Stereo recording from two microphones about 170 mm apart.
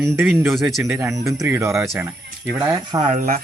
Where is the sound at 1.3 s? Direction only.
15° right (ahead or behind).